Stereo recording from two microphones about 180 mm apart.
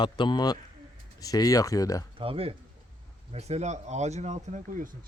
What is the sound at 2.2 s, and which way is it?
Speech, 30° right (ahead or behind).